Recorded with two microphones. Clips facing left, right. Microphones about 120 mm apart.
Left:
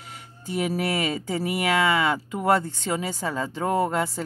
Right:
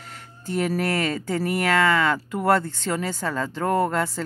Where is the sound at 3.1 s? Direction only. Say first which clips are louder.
Right 1 dB; 15° left (ahead or behind).